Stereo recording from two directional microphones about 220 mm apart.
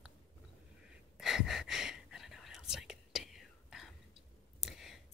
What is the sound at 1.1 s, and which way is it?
Whispering, centre (ahead or behind).